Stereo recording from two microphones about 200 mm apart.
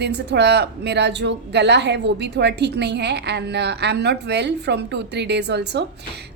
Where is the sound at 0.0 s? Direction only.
60° right (ahead or behind).